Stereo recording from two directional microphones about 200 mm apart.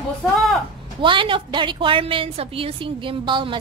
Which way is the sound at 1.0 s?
25° right (ahead or behind).